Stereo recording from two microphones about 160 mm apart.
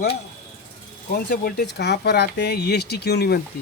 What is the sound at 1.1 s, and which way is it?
Speech, 80° left.